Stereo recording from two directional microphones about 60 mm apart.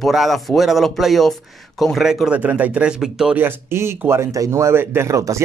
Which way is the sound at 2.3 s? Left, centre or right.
Right.